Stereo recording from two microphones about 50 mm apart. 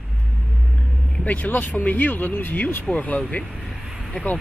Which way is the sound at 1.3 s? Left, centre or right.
Left.